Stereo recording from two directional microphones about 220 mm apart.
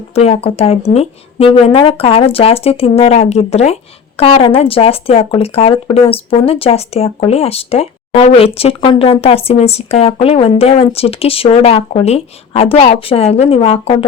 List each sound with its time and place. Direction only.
0.1 s speech: 30° left (ahead or behind)